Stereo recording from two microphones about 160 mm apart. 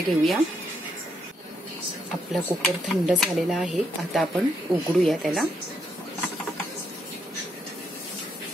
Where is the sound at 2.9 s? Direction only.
Centre (ahead or behind).